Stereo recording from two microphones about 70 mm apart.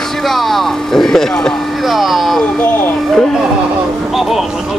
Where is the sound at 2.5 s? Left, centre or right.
Left.